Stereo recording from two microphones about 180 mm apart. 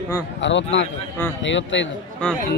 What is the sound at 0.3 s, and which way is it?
Speech, 90° left.